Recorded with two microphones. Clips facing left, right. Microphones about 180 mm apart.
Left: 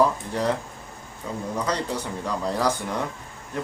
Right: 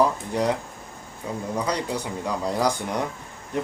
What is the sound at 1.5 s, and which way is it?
Speech, 10° right (ahead or behind).